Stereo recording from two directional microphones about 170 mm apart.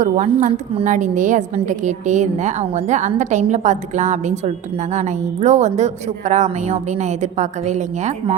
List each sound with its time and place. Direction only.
0.0 s a woman's voice: 45° right (ahead or behind)